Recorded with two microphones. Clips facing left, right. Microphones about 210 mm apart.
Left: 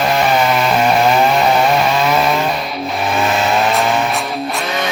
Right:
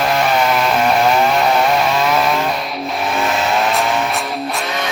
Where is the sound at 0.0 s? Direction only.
Centre (ahead or behind).